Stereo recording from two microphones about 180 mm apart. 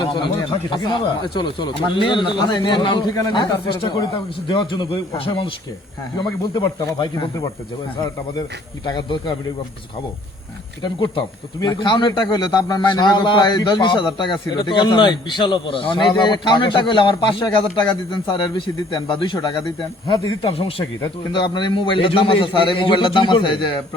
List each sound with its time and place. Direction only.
0.0 s speech: 25° left (ahead or behind)
10.8 s speech: 25° left (ahead or behind)